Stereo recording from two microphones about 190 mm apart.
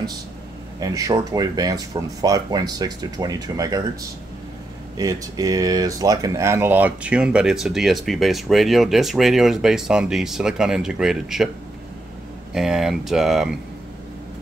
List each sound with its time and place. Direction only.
0.7 s speech: 20° right (ahead or behind)
4.9 s speech: 20° right (ahead or behind); by 11.4 s 5° right (ahead or behind)
12.5 s speech: centre (ahead or behind)